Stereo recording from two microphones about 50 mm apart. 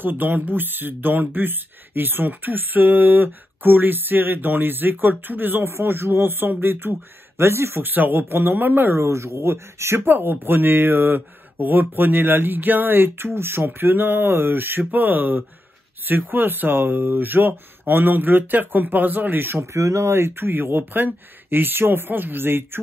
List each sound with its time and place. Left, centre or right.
0.0 s speech: right
7.8 s speech: right
8.9 s speech: right
10.0 s speech: right
19.6 s speech: right